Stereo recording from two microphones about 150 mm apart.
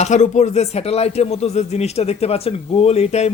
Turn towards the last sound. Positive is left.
turn(degrees=45)  # may be behind; listen again after turning